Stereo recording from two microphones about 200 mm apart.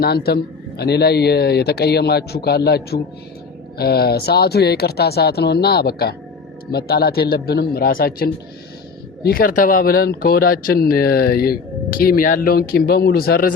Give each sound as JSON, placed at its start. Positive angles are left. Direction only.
{"t": 0.0, "sound": "speech", "side_deg": 50}